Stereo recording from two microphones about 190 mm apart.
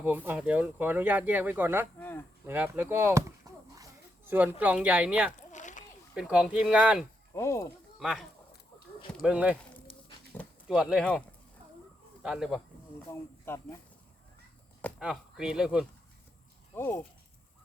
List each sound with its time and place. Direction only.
0.0 s speech: 10° right (ahead or behind)
2.0 s a sound: 10° left (ahead or behind)
2.5 s speech: 10° right (ahead or behind)
5.4 s rowboat: 40° left (ahead or behind)
6.1 s speech: 5° right (ahead or behind)
7.3 s speech: 15° left (ahead or behind)
7.9 s speech: centre (ahead or behind)
12.2 s speech: centre (ahead or behind)
13.5 s speech: 10° left (ahead or behind)
14.9 s speech: 5° right (ahead or behind)
16.7 s speech: 10° left (ahead or behind)